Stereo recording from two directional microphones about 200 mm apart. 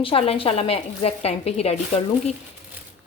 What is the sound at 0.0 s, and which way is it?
A woman's voice, 30° left (ahead or behind).